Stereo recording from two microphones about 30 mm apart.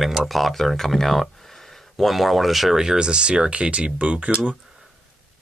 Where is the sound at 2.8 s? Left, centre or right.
Right.